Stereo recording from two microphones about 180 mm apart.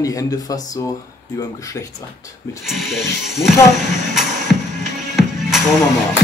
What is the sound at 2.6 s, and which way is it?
Music, centre (ahead or behind).